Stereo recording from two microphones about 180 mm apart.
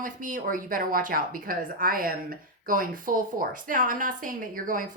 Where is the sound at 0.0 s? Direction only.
50° right (ahead or behind).